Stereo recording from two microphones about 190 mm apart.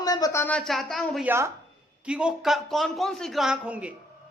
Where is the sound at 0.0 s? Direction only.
20° left (ahead or behind).